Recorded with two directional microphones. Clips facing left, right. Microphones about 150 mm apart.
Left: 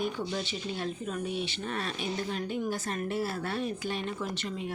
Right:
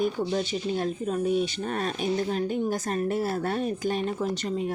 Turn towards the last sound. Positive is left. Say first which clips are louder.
# right 7 dB
turn(degrees=-40)  # may be behind; listen again after turning